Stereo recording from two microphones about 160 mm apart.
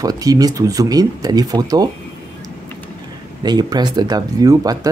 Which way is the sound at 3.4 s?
25° right (ahead or behind).